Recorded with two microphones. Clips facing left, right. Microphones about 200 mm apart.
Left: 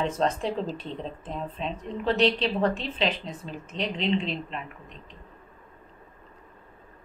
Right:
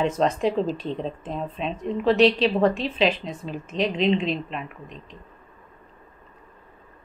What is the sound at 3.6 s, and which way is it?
Speech, 90° right.